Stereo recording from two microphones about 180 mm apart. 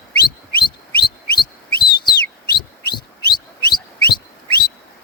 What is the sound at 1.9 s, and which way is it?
Bird, 25° left (ahead or behind).